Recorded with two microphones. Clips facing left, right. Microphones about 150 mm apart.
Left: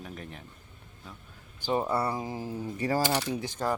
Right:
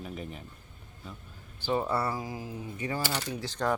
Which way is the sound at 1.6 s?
15° left (ahead or behind).